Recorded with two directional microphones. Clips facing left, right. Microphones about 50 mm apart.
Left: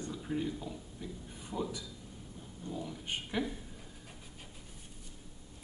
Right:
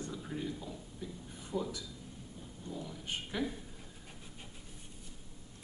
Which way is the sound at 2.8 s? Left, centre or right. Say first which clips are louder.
Left 1 dB; centre.